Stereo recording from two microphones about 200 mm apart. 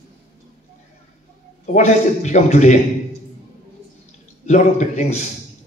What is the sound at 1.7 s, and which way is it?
A man's voice, 35° left (ahead or behind).